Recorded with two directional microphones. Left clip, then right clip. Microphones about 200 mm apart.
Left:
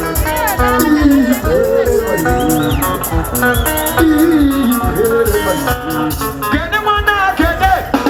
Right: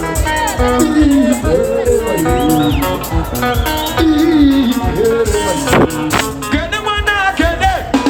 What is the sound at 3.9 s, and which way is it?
Music, 20° right (ahead or behind).